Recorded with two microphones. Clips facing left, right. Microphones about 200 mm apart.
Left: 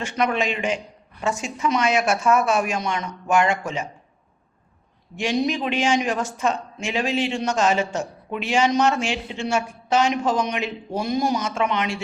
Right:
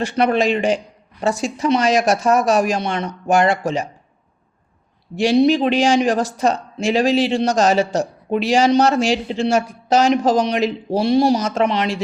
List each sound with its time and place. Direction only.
0.0 s speech: 35° right (ahead or behind)
5.1 s speech: 35° right (ahead or behind)